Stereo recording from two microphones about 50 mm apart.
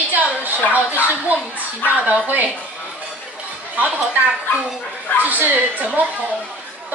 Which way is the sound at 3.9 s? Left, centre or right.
Right.